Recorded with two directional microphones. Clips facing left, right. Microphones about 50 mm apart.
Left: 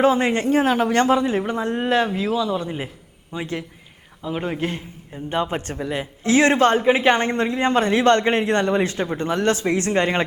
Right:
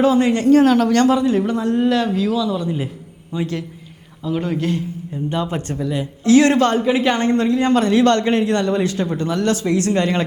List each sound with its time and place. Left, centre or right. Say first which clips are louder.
0.0 s a man's voice: right 3 dB; left